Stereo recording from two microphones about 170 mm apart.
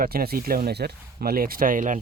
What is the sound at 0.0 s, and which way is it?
Speech, 60° right (ahead or behind).